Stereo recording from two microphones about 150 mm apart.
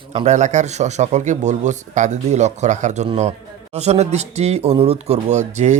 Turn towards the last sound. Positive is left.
turn(degrees=-50)  # may be behind; listen again after turning